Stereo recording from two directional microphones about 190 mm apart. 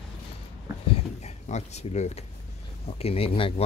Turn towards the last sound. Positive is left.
turn(degrees=30)  # may be behind; listen again after turning